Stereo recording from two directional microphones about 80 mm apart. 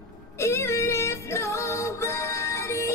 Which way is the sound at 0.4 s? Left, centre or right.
Left.